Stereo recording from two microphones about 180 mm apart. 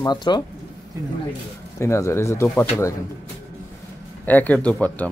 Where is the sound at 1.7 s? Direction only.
15° left (ahead or behind).